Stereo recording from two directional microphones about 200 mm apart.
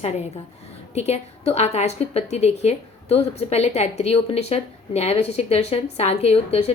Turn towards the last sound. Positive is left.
turn(degrees=30)  # may be behind; listen again after turning